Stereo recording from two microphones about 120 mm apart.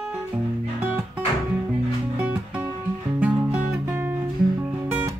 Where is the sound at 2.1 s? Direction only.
20° right (ahead or behind).